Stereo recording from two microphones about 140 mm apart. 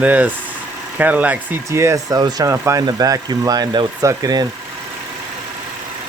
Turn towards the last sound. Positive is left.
turn(degrees=-25)  # may be behind; listen again after turning